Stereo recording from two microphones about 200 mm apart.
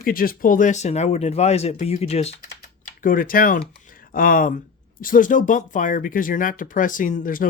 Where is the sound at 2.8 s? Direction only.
45° left (ahead or behind).